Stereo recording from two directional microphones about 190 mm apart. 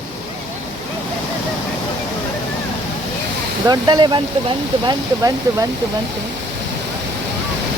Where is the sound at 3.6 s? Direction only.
20° right (ahead or behind).